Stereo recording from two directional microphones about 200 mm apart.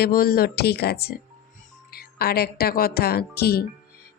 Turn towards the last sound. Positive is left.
turn(degrees=50)  # may be behind; listen again after turning